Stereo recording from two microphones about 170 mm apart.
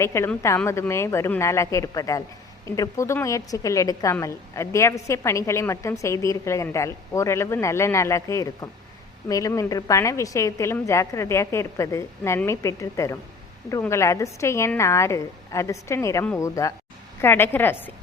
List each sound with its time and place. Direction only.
0.0 s a woman's voice: 15° left (ahead or behind)